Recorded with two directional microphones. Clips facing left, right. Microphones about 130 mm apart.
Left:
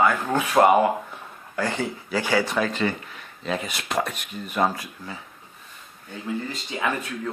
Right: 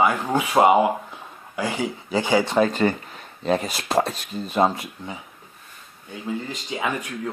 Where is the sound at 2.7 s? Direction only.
40° right (ahead or behind); by 5.2 s 20° right (ahead or behind).